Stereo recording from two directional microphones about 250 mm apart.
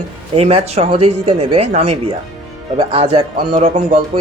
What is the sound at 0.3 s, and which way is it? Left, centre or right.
A man's voice, right.